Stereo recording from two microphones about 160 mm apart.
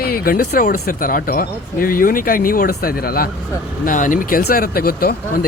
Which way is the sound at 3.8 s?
55° left (ahead or behind).